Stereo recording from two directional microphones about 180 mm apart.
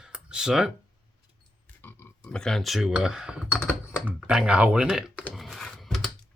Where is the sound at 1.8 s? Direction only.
10° left (ahead or behind); by 5.0 s 5° right (ahead or behind).